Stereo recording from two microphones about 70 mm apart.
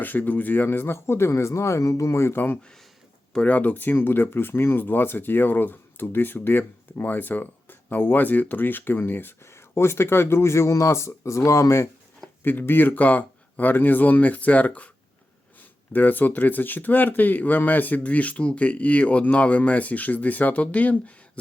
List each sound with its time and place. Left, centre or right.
0.0 s speech: left
12.4 s speech: left
15.9 s speech: left